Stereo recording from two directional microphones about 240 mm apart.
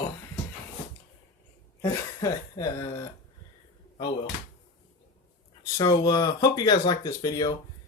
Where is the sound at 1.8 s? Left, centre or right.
Centre.